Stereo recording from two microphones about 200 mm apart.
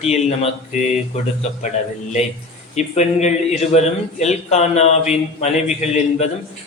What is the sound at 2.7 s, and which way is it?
A man's voice, 35° left (ahead or behind).